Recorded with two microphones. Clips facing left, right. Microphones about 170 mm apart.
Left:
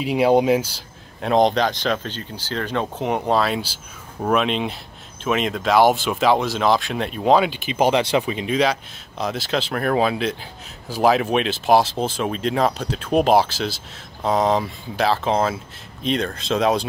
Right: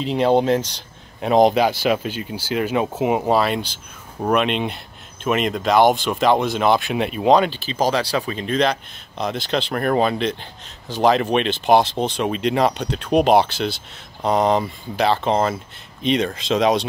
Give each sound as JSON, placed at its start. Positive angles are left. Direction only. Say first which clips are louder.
{"t": 0.0, "sound": "speech", "louder": "left 1 dB", "side_deg": 10}
{"t": 7.5, "sound": "speech", "louder": "left 2 dB", "side_deg": 15}